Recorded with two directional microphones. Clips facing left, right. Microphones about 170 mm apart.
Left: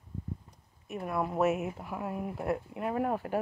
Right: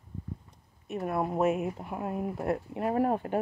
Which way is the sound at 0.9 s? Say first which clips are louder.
Right 3 dB; 30° right (ahead or behind).